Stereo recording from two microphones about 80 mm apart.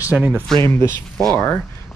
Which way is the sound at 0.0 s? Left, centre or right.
Centre.